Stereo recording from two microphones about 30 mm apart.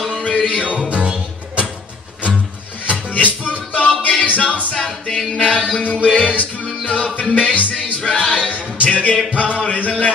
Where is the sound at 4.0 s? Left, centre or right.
Left.